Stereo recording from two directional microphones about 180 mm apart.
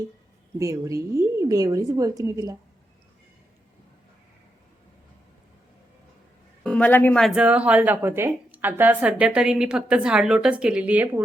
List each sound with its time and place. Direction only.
0.6 s a woman's voice: 15° right (ahead or behind)
6.6 s speech: 5° left (ahead or behind)